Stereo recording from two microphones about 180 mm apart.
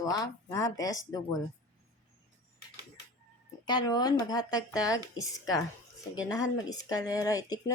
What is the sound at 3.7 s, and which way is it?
Speech, 20° left (ahead or behind).